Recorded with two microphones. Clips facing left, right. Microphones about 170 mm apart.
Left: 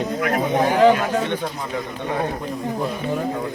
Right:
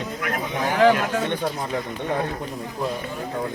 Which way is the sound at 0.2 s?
45° left (ahead or behind).